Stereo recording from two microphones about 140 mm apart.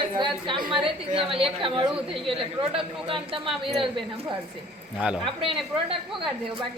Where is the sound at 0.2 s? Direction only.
35° right (ahead or behind).